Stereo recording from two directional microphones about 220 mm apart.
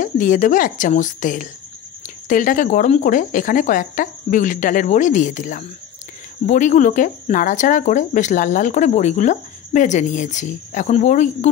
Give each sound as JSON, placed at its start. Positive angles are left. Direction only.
{"t": 0.0, "sound": "speech", "side_deg": 35}